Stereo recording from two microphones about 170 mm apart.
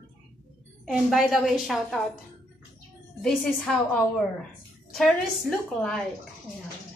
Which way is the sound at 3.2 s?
5° left (ahead or behind).